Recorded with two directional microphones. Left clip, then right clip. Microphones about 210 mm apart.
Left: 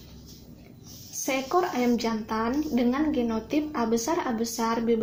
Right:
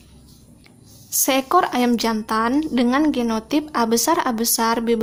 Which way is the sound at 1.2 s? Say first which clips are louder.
Right 8 dB; 35° right (ahead or behind).